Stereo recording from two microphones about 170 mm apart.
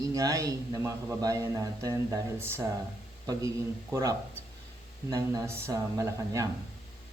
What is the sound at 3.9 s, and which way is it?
A man's voice, 20° right (ahead or behind).